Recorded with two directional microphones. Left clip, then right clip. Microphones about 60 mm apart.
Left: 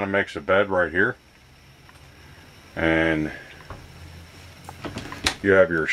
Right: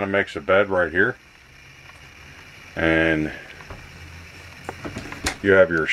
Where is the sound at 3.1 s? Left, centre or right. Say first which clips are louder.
Right 2 dB; centre.